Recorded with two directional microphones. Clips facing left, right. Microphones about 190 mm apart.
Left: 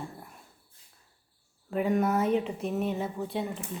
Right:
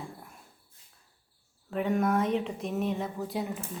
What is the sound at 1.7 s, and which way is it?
Speech, 5° left (ahead or behind).